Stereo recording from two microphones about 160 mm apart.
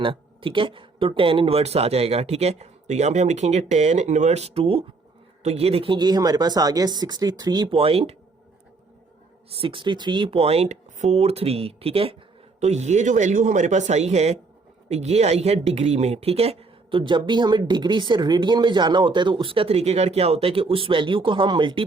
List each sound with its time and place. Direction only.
0.0 s speech: 30° right (ahead or behind)
9.5 s speech: 35° right (ahead or behind)